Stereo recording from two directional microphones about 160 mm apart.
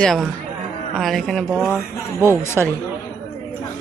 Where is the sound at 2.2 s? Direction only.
15° left (ahead or behind).